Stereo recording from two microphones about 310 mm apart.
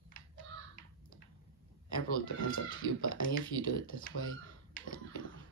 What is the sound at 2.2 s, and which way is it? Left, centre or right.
Speech, left.